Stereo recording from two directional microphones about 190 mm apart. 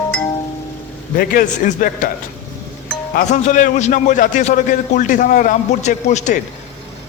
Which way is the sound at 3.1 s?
40° left (ahead or behind).